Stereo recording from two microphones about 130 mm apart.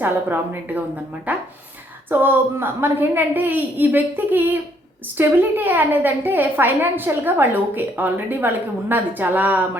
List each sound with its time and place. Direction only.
0.0 s a woman's voice: 15° right (ahead or behind)